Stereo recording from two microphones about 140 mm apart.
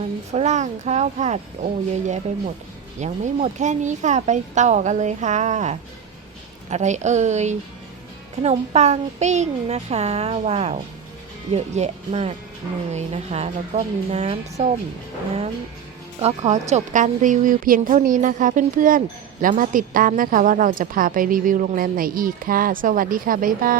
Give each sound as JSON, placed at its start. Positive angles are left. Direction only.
{"t": 0.3, "sound": "a child's voice", "side_deg": -55}
{"t": 16.2, "sound": "a woman's voice", "side_deg": -55}